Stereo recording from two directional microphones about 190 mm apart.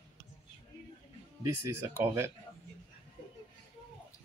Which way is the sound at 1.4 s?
15° right (ahead or behind).